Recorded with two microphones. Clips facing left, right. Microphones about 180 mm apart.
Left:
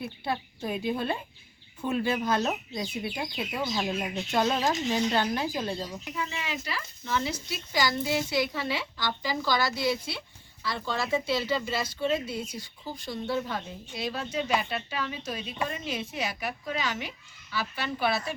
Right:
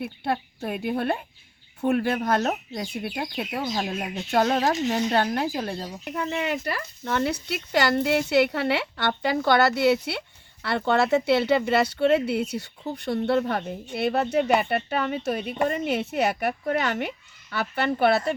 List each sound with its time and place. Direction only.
0.0 s speech: 60° right (ahead or behind)